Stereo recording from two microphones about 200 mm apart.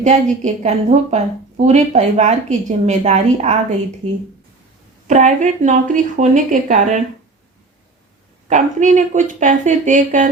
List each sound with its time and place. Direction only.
0.0 s a woman's voice: 35° right (ahead or behind)
5.0 s a woman's voice: 40° right (ahead or behind)
8.4 s a woman's voice: 40° right (ahead or behind)